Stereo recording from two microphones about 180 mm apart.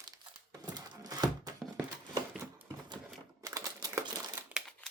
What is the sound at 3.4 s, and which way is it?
Crumpling, 20° right (ahead or behind).